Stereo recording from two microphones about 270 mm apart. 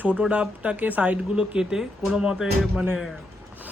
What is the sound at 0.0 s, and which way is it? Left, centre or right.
Speech, centre.